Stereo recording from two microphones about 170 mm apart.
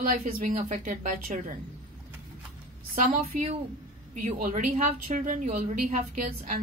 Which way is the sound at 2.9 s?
55° right (ahead or behind).